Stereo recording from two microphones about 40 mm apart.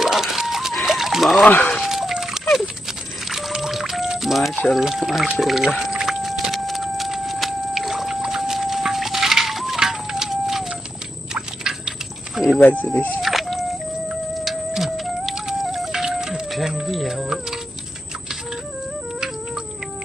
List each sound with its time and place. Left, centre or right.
0.0 s a sound: centre
1.5 s speech: left
1.8 s a sound: centre
2.4 s a sound: centre
3.2 s music: centre
4.2 s boiling: centre
4.7 s speech: centre
6.0 s a sound: centre
12.6 s speech: left
13.2 s music: centre
15.9 s music: centre
16.8 s speech: centre
17.2 s speech: centre